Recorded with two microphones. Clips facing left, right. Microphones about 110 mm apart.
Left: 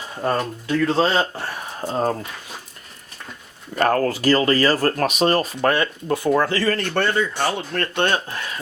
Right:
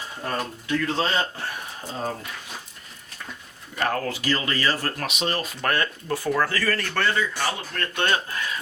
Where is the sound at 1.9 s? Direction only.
55° left (ahead or behind).